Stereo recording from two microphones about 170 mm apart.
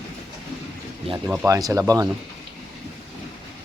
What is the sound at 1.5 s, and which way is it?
Speech, 20° right (ahead or behind).